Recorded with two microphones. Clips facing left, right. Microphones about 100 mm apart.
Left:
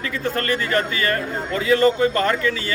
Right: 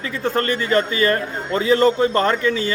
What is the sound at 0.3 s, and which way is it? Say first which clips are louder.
A man's voice: right 4 dB; 25° right (ahead or behind).